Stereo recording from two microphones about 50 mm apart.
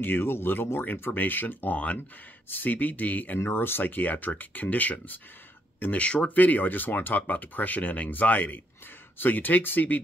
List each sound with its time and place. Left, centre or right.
0.0 s speech: left
3.4 s speech: left